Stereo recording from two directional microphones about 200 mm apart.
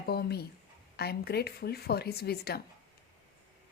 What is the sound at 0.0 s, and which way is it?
A woman's voice, 50° left (ahead or behind).